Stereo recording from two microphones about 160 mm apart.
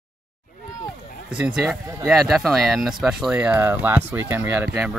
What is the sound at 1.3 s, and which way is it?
Speech, 5° right (ahead or behind).